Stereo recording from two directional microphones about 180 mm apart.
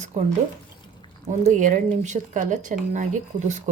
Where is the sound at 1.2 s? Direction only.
40° right (ahead or behind).